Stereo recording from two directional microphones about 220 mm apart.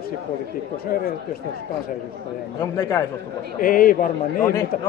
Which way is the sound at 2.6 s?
15° left (ahead or behind).